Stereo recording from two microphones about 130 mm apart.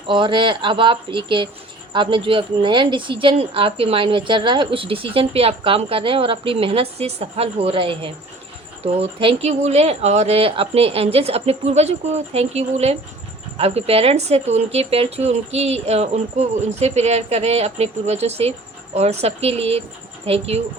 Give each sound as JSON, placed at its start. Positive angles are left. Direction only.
{"t": 0.1, "sound": "speech", "side_deg": -40}